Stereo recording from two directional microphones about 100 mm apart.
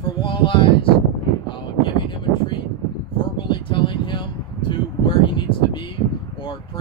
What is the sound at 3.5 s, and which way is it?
Speech, 55° left (ahead or behind).